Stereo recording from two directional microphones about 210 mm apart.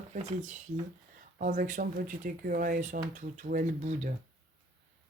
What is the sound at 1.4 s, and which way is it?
Speech, 40° right (ahead or behind).